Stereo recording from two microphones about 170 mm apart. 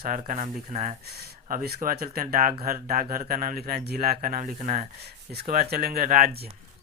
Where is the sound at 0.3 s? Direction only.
50° right (ahead or behind).